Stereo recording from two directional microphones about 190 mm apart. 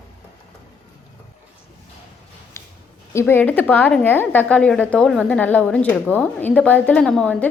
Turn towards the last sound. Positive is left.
turn(degrees=5)  # may be behind; listen again after turning